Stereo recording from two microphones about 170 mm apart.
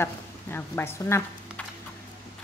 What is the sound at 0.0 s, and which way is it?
A woman's voice, 15° left (ahead or behind).